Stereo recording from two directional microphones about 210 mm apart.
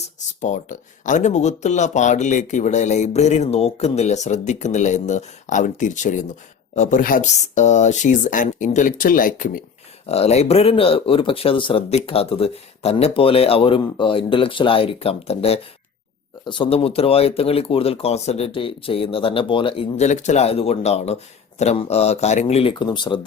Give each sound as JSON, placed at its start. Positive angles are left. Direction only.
{"t": 0.4, "sound": "speech", "side_deg": 35}
{"t": 10.1, "sound": "speech", "side_deg": 30}